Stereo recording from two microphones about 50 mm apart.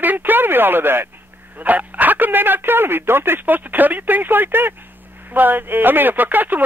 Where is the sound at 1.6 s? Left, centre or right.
Right.